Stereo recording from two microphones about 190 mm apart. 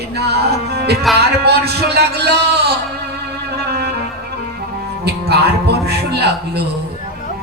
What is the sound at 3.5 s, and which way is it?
Music, 60° right (ahead or behind).